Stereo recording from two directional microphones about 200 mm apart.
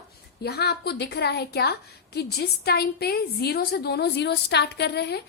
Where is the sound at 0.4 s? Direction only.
55° left (ahead or behind).